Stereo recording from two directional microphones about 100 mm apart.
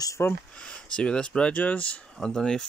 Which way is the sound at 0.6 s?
10° left (ahead or behind).